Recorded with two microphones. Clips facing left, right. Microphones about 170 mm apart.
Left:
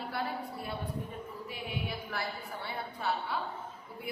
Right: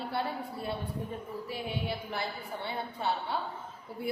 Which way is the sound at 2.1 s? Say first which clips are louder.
Right 2 dB; 25° right (ahead or behind).